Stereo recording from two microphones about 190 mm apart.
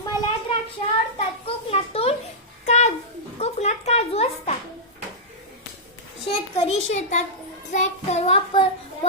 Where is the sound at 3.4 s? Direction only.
35° left (ahead or behind).